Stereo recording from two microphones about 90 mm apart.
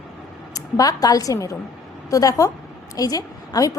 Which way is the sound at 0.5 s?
40° left (ahead or behind).